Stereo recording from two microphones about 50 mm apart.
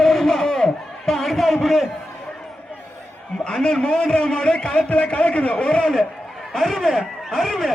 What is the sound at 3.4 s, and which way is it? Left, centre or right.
A man's voice, centre.